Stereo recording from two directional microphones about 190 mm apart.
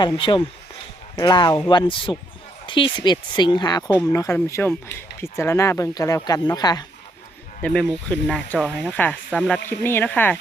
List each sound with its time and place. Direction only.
0.2 s speech: 25° left (ahead or behind)
7.6 s speech: 5° left (ahead or behind)